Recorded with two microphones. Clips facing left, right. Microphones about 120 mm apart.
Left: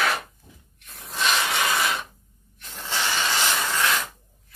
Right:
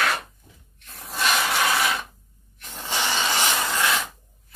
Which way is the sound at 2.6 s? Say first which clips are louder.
Right 1 dB; 15° right (ahead or behind).